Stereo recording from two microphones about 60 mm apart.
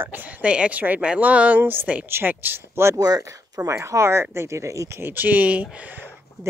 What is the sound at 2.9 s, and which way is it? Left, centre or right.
Speech, right.